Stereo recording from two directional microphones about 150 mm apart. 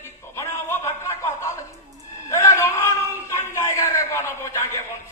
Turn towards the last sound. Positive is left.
turn(degrees=15)  # may be behind; listen again after turning